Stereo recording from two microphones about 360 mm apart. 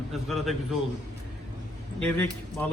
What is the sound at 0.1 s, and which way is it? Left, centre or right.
Speech, centre.